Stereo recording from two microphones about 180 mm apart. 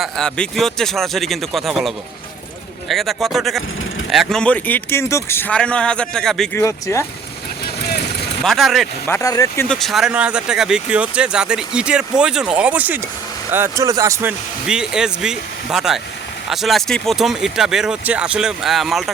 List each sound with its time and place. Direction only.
0.0 s speech: 5° left (ahead or behind)
2.9 s speech: centre (ahead or behind)
6.6 s speech: 15° left (ahead or behind)
8.4 s speech: centre (ahead or behind)
9.0 s speech: 15° left (ahead or behind)
9.6 s speech: centre (ahead or behind)